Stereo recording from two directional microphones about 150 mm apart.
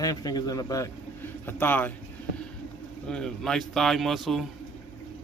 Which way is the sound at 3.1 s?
5° left (ahead or behind).